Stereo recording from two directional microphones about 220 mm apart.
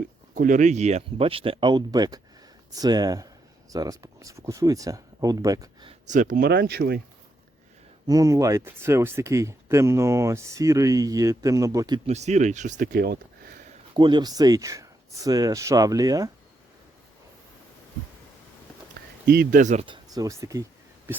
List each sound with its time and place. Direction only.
0.3 s speech: 35° right (ahead or behind)
6.5 s speech: 50° right (ahead or behind)
8.0 s speech: 15° right (ahead or behind)
12.0 s speech: 30° right (ahead or behind)
13.9 s speech: 20° right (ahead or behind)
19.3 s speech: 40° right (ahead or behind); by 20.7 s 15° right (ahead or behind)